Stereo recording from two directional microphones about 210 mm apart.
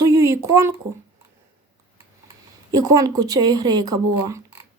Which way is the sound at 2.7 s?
15° right (ahead or behind).